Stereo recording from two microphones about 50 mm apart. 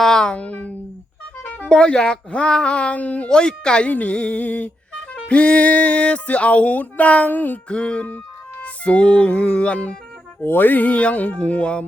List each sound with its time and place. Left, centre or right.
0.0 s music: centre
0.3 s speech: left
1.5 s music: left
1.7 s speech: centre
3.2 s speech: centre; by 7.6 s left
7.7 s speech: left
8.0 s music: left
10.4 s speech: left